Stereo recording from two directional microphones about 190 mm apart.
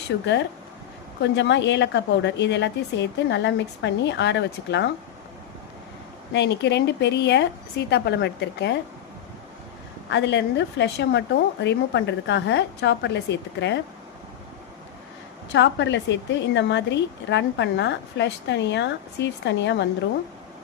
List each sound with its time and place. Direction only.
1.2 s a woman's voice: 70° left (ahead or behind)
6.3 s a woman's voice: 65° left (ahead or behind)
10.1 s a woman's voice: 65° left (ahead or behind)
15.5 s a woman's voice: 70° left (ahead or behind)